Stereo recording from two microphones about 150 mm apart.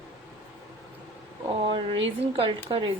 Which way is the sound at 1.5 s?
35° right (ahead or behind).